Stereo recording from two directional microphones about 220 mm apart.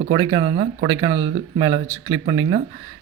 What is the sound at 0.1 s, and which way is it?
Speech, 20° right (ahead or behind).